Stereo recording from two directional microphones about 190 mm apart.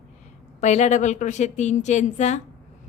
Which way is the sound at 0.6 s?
35° left (ahead or behind).